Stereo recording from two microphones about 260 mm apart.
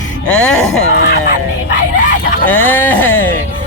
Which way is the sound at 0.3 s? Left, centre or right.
Centre.